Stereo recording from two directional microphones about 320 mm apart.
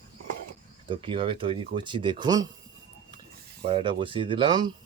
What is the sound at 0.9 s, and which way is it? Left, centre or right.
Speech, centre.